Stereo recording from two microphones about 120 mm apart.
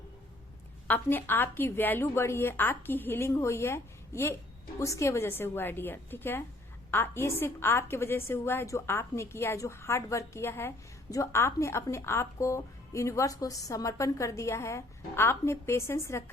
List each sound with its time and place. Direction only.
0.9 s a woman's voice: 15° left (ahead or behind)